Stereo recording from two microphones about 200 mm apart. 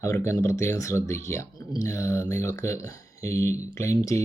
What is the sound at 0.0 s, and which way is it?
Speech, 15° left (ahead or behind).